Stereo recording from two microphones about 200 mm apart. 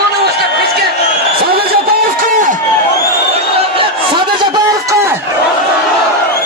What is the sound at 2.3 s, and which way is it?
Run, 40° right (ahead or behind).